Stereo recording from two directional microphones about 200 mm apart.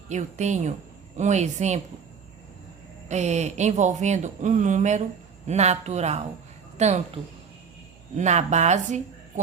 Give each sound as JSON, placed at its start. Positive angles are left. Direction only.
{"t": 0.1, "sound": "speech", "side_deg": -35}
{"t": 3.1, "sound": "speech", "side_deg": -35}
{"t": 8.1, "sound": "speech", "side_deg": -35}